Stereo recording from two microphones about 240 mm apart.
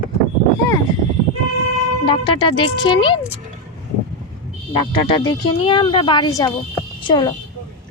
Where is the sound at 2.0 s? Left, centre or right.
Centre.